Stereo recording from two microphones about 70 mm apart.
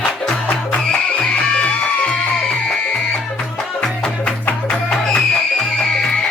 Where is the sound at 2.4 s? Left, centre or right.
Centre.